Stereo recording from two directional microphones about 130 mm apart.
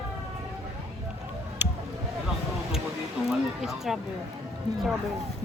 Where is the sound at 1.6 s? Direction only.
15° right (ahead or behind).